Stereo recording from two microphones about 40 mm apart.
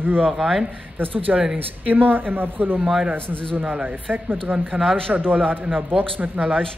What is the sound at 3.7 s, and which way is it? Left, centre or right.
Speech, right.